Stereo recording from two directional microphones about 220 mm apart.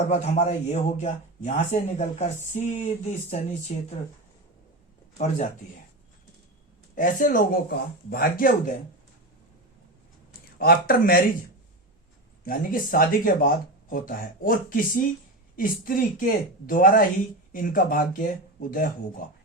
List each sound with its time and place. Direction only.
0.0 s a man's voice: 30° left (ahead or behind)
5.1 s a man's voice: 30° left (ahead or behind)
6.9 s a man's voice: 35° left (ahead or behind)
10.6 s speech: 45° left (ahead or behind)
12.5 s a man's voice: 40° left (ahead or behind)